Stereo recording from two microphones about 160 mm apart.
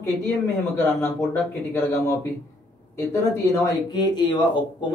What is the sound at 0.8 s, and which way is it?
Speech, 15° left (ahead or behind).